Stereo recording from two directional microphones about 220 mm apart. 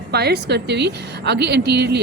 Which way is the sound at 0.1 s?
45° right (ahead or behind).